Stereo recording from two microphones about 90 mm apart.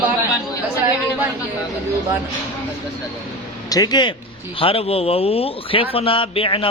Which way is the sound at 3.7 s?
45° left (ahead or behind).